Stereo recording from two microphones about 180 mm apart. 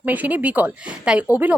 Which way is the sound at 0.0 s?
10° right (ahead or behind).